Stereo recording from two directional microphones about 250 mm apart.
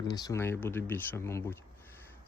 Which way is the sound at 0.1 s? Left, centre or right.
Centre.